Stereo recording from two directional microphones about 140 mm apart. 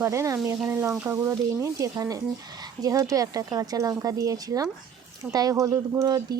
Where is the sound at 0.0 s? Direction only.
20° right (ahead or behind).